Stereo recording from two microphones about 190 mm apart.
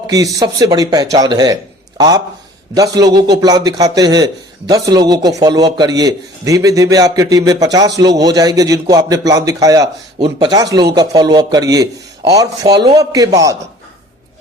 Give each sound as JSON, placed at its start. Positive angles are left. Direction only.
{"t": 0.1, "sound": "a man's voice", "side_deg": -20}